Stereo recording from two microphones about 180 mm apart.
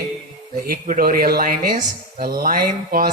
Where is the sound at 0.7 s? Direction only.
55° right (ahead or behind).